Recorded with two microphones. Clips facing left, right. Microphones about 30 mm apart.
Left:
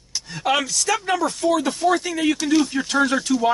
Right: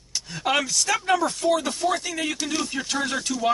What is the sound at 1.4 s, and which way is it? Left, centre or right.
Speech, centre.